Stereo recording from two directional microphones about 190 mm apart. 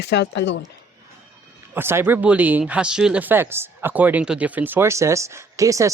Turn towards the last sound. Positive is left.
turn(degrees=-15)  # may be behind; listen again after turning